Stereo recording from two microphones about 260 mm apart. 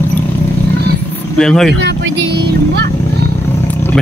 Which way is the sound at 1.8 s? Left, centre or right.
Right.